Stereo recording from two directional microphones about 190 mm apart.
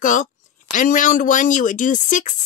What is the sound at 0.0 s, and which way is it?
Speech, 40° left (ahead or behind).